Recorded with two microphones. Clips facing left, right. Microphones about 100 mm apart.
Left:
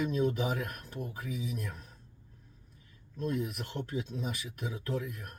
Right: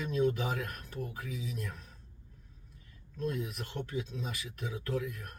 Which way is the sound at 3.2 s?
30° left (ahead or behind).